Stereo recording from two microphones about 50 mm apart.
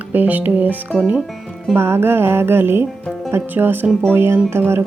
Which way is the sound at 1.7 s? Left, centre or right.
Right.